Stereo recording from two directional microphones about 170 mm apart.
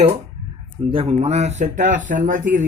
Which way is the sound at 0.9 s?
35° right (ahead or behind).